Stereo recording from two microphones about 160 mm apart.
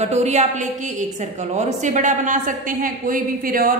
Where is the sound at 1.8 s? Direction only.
50° right (ahead or behind).